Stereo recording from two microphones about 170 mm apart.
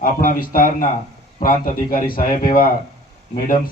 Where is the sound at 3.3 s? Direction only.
55° left (ahead or behind).